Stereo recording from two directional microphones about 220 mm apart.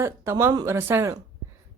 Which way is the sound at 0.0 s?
10° right (ahead or behind).